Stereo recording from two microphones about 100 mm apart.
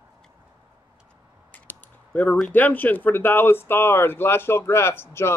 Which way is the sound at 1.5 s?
20° left (ahead or behind).